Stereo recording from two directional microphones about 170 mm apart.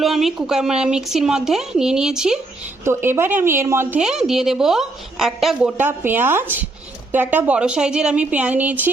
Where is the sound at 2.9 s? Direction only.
15° right (ahead or behind).